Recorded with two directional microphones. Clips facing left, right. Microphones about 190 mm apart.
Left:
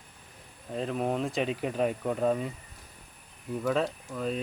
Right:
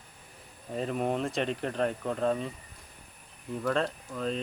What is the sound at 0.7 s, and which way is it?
Speech, centre (ahead or behind).